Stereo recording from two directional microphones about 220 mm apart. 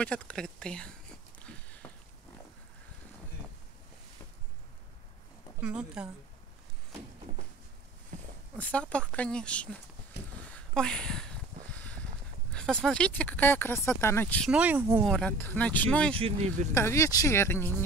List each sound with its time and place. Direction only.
0.0 s speech: 5° left (ahead or behind)
1.4 s a sound: 5° left (ahead or behind)
5.6 s speech: 5° right (ahead or behind)
8.5 s speech: 5° left (ahead or behind)
10.5 s a sound: 5° left (ahead or behind)
12.5 s speech: 5° left (ahead or behind)
14.5 s speech: 5° right (ahead or behind)
15.0 s speech: 5° left (ahead or behind)
16.2 s speech: 30° right (ahead or behind)
16.7 s speech: 10° left (ahead or behind)